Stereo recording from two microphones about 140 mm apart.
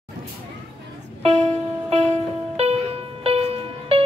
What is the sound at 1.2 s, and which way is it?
Music, 50° right (ahead or behind).